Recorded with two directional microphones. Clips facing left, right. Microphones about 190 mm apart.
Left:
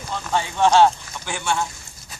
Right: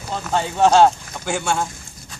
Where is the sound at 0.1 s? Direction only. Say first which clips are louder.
Right 2 dB; 40° right (ahead or behind).